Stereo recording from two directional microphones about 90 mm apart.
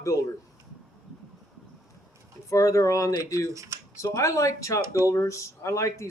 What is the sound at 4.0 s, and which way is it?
Speech, 35° left (ahead or behind).